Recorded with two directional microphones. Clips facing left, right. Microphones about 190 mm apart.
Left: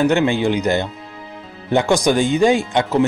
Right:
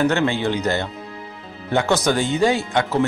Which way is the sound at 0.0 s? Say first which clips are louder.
Left 3 dB; 15° left (ahead or behind).